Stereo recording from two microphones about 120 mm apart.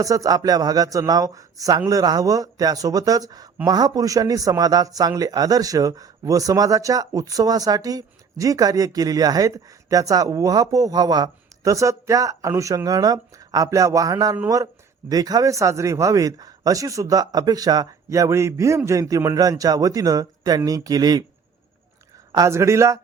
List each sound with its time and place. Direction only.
0.0 s speech: 30° right (ahead or behind)
22.3 s speech: 25° right (ahead or behind)